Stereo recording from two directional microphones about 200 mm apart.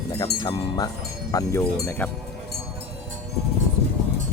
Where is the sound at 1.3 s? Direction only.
15° left (ahead or behind).